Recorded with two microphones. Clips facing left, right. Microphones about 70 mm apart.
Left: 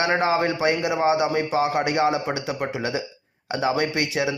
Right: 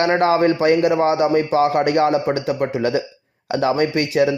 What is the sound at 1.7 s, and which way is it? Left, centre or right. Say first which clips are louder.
A man's voice: right 5 dB; right.